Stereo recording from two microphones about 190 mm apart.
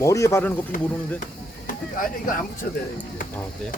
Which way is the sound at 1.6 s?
45° left (ahead or behind).